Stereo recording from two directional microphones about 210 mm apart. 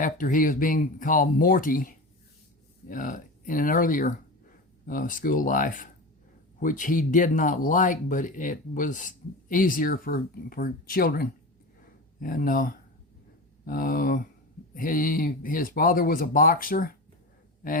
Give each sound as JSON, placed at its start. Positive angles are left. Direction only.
{"t": 0.0, "sound": "speech", "side_deg": 40}